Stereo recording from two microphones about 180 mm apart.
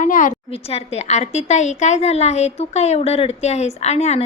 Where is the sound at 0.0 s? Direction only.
45° left (ahead or behind).